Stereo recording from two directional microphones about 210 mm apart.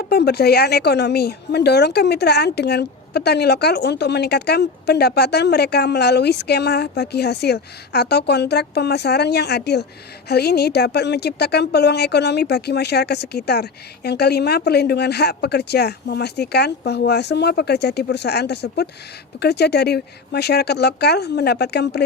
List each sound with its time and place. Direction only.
0.0 s a woman's voice: 50° left (ahead or behind)